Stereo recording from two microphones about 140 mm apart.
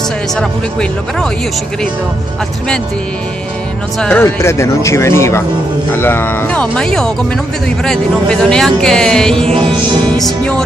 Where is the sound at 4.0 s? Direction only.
15° left (ahead or behind).